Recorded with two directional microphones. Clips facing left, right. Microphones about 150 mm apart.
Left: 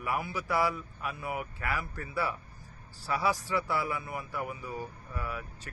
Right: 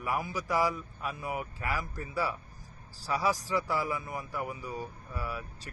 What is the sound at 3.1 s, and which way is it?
Speech, 25° right (ahead or behind).